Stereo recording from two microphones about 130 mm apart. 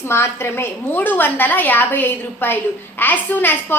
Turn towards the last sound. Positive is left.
turn(degrees=15)  # may be behind; listen again after turning